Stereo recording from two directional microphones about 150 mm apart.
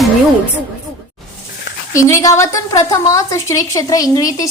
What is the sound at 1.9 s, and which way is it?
A woman's voice, 20° left (ahead or behind).